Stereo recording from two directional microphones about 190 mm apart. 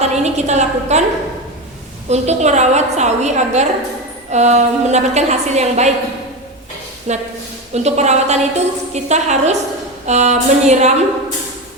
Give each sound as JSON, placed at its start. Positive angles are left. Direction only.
{"t": 0.0, "sound": "a woman's voice", "side_deg": -35}
{"t": 2.0, "sound": "a woman's voice", "side_deg": -35}
{"t": 7.1, "sound": "a woman's voice", "side_deg": -35}